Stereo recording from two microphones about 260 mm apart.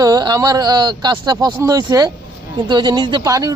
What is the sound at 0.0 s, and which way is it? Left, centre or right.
Speech, centre.